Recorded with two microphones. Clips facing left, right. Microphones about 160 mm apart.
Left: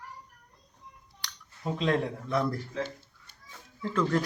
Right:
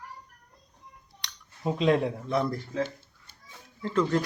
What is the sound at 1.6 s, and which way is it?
Speech, 15° right (ahead or behind).